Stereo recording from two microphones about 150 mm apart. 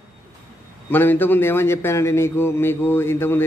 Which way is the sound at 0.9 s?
15° left (ahead or behind).